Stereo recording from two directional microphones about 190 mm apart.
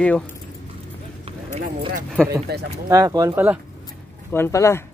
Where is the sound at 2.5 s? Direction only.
55° right (ahead or behind).